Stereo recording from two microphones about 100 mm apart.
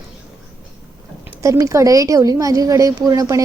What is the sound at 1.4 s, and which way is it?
A woman's voice, 30° right (ahead or behind).